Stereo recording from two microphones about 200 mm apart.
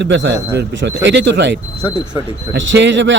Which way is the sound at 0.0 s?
60° right (ahead or behind).